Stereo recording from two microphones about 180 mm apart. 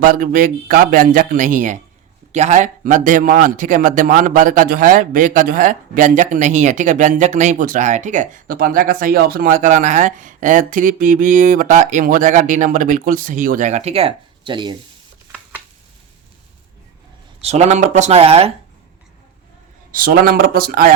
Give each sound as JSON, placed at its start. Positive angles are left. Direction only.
{"t": 0.0, "sound": "a man's voice", "side_deg": -50}
{"t": 17.4, "sound": "speech", "side_deg": -40}
{"t": 19.9, "sound": "speech", "side_deg": -55}